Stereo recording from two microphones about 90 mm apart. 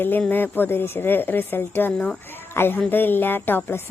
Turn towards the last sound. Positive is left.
turn(degrees=25)  # may be behind; listen again after turning